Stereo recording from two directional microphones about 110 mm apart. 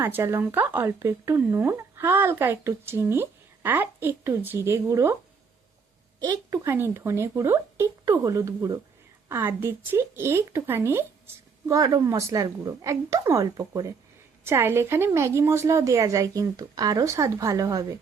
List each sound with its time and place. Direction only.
0.0 s speech: 20° right (ahead or behind)
6.1 s a woman's voice: 40° right (ahead or behind)
6.7 s speech: 20° right (ahead or behind)
11.7 s a woman's voice: 35° right (ahead or behind)